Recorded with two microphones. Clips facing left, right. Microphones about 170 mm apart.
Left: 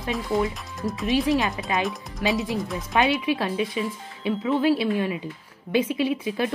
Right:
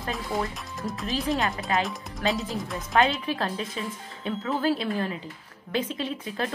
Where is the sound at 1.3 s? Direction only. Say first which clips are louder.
Left 3 dB; 20° left (ahead or behind).